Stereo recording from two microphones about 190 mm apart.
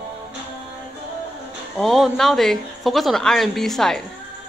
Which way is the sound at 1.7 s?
Centre (ahead or behind).